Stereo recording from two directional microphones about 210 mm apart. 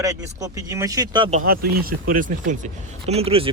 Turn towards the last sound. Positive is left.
turn(degrees=-25)  # may be behind; listen again after turning